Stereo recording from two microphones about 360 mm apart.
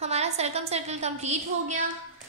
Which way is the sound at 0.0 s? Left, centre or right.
Centre.